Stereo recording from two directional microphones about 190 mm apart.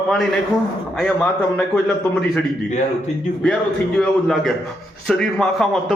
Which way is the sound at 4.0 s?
Centre (ahead or behind).